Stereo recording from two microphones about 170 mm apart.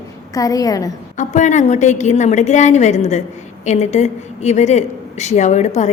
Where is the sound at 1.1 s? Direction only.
45° left (ahead or behind).